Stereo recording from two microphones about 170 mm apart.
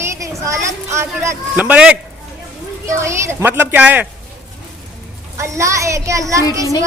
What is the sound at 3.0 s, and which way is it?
A child's voice, 15° right (ahead or behind).